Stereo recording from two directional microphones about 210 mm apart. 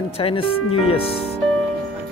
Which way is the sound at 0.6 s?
90° left.